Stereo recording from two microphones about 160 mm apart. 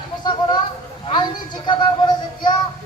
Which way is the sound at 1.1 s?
30° left (ahead or behind).